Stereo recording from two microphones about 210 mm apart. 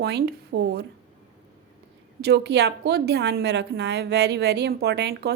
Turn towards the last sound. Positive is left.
turn(degrees=-50)  # may be behind; listen again after turning